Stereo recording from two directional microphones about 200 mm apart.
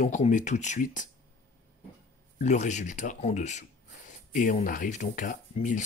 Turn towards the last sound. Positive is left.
turn(degrees=40)  # may be behind; listen again after turning